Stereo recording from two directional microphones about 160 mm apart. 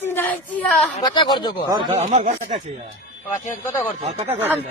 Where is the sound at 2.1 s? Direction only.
50° right (ahead or behind).